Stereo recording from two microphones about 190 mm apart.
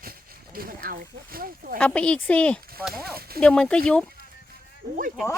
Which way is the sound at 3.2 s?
55° right (ahead or behind).